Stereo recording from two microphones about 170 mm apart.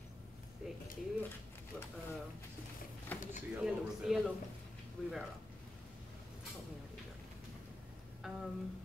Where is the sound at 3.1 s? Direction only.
10° left (ahead or behind).